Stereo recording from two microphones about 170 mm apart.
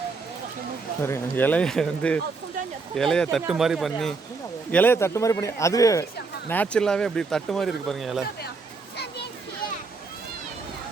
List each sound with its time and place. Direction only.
1.0 s speech: 10° left (ahead or behind)
4.7 s speech: 10° left (ahead or behind)
6.5 s speech: 5° left (ahead or behind)